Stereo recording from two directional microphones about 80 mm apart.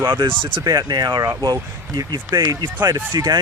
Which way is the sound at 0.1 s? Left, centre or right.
Right.